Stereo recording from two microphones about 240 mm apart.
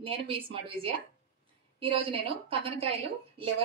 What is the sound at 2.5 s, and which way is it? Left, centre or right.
Speech, right.